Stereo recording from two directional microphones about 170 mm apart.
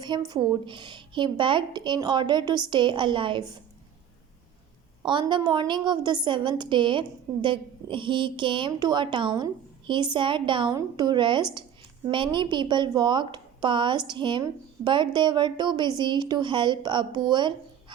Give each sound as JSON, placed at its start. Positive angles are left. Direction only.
{"t": 0.0, "sound": "a woman's voice", "side_deg": -25}
{"t": 5.0, "sound": "a woman's voice", "side_deg": -25}